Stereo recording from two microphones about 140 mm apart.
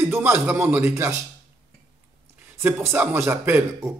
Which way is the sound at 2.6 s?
15° right (ahead or behind).